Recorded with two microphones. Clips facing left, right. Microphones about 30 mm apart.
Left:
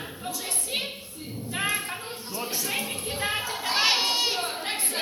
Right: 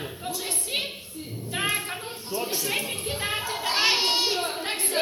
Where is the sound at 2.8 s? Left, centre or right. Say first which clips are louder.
Right 1 dB; right.